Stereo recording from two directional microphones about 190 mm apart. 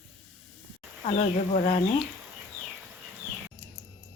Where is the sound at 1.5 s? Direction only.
30° left (ahead or behind).